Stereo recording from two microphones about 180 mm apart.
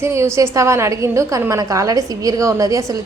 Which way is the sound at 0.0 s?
15° right (ahead or behind).